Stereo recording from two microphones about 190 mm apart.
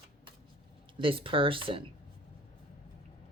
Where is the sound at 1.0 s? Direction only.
25° right (ahead or behind).